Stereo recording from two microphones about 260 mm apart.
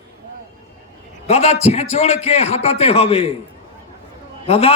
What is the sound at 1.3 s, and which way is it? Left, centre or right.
A man's voice, left.